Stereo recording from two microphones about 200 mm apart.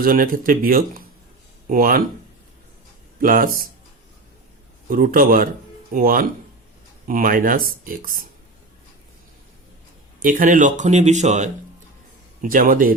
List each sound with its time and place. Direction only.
0.0 s speech: 45° right (ahead or behind)
3.2 s speech: 45° right (ahead or behind)
4.9 s speech: 45° right (ahead or behind)
10.2 s speech: 40° right (ahead or behind)